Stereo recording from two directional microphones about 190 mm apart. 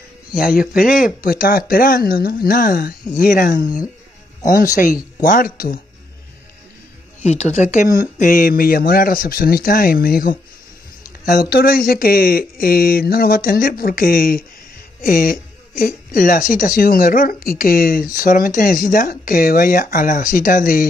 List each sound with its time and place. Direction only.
0.3 s speech: 50° left (ahead or behind)
7.2 s speech: 35° left (ahead or behind)